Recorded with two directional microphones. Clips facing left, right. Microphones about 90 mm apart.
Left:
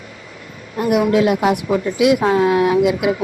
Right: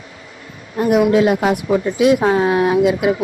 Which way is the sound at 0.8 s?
30° right (ahead or behind).